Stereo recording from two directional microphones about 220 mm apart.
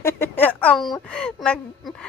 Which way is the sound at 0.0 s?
10° left (ahead or behind).